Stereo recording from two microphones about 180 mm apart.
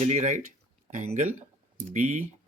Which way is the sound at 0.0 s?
45° right (ahead or behind).